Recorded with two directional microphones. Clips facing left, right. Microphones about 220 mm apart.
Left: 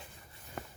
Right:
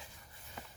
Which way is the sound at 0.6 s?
60° left (ahead or behind).